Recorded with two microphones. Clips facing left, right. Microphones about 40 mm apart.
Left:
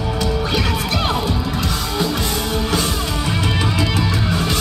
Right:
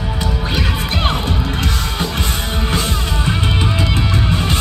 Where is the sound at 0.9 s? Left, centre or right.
Right.